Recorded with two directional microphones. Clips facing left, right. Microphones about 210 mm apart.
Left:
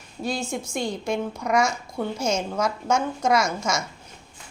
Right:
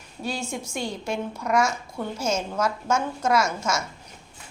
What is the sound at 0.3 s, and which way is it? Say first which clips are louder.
A woman's voice: left 2 dB; 10° right (ahead or behind).